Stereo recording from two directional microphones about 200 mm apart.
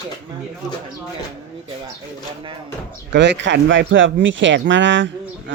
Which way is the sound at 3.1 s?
60° right (ahead or behind).